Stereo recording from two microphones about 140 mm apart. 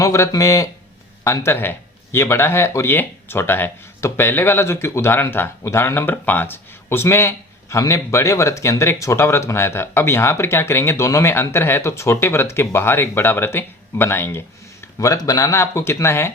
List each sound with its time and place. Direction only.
0.0 s speech: 25° left (ahead or behind)